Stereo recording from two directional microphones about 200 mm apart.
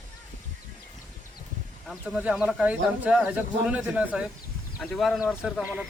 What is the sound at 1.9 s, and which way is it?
Speech, 5° right (ahead or behind).